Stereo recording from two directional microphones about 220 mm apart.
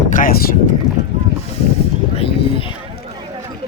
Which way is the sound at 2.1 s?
25° left (ahead or behind).